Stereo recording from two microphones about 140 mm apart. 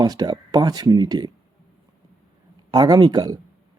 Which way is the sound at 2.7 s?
30° right (ahead or behind).